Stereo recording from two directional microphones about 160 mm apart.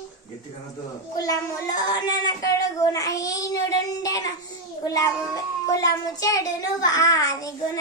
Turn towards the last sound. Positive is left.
turn(degrees=20)  # may be behind; listen again after turning